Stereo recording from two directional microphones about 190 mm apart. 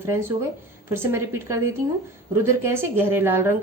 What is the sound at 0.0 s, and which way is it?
A woman's voice, 15° right (ahead or behind).